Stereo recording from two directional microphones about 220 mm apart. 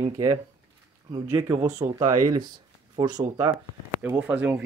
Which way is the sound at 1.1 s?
15° right (ahead or behind).